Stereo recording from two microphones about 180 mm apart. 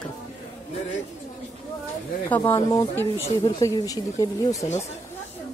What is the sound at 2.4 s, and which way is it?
Speech, 30° left (ahead or behind).